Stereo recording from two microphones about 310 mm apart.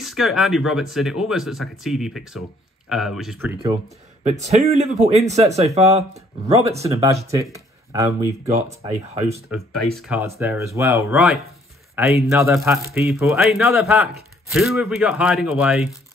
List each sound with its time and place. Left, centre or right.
0.0 s speech: centre
4.2 s speech: right
8.5 s speech: right
9.5 s speech: centre